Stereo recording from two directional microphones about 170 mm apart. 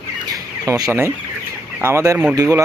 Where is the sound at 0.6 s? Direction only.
20° right (ahead or behind).